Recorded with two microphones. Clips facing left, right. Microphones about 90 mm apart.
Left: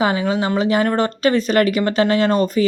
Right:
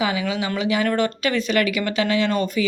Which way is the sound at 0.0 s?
40° left (ahead or behind).